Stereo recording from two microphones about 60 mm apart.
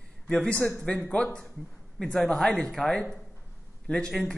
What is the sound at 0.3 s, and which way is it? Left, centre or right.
A man's voice, centre.